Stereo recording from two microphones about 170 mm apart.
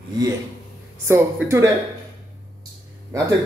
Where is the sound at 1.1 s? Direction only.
15° right (ahead or behind).